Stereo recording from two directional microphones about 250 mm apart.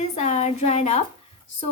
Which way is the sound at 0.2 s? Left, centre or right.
Left.